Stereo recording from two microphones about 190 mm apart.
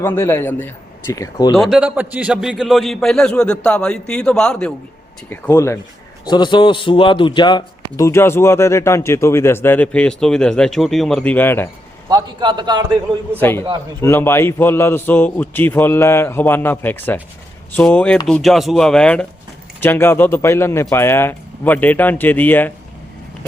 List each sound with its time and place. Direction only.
0.0 s a man's voice: 10° left (ahead or behind)
1.5 s a man's voice: centre (ahead or behind)
12.0 s a man's voice: 20° right (ahead or behind)
13.4 s a man's voice: 10° left (ahead or behind)